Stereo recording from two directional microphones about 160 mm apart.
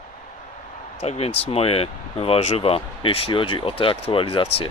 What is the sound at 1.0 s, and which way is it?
Speech, 40° left (ahead or behind).